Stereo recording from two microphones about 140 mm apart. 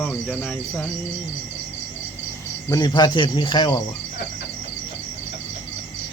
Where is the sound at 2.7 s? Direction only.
30° left (ahead or behind).